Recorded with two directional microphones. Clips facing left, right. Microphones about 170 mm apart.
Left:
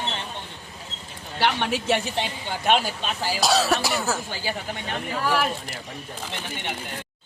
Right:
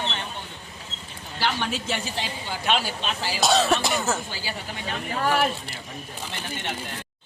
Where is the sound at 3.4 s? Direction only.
Centre (ahead or behind).